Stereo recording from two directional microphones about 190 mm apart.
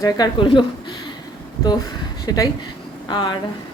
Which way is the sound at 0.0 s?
25° left (ahead or behind).